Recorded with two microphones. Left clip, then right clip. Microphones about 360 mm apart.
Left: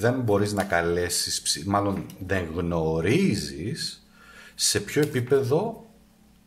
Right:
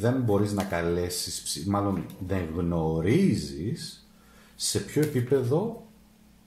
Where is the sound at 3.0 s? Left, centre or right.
Left.